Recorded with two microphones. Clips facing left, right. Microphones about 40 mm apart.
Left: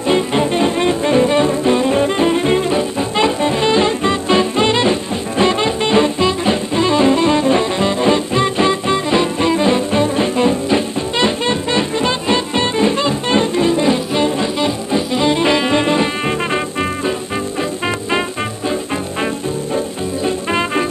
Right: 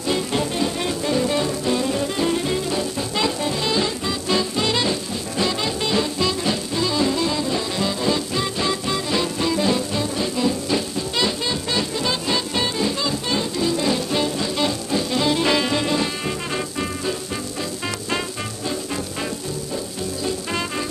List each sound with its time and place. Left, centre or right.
0.1 s music: left
20.2 s music: left